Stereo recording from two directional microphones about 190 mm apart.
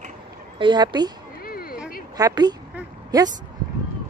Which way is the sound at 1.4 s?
50° left (ahead or behind).